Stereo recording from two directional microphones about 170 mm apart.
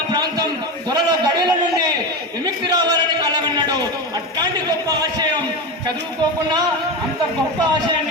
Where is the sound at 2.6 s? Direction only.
25° right (ahead or behind).